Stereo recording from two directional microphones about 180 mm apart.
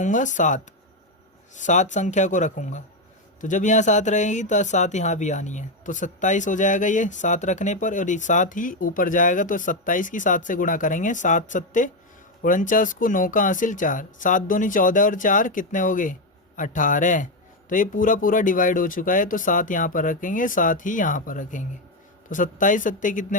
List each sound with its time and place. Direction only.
0.0 s speech: 45° left (ahead or behind)